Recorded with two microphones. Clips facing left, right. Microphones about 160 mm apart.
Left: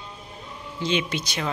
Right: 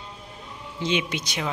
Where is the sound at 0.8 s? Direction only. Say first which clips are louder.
Left 1 dB; 15° right (ahead or behind).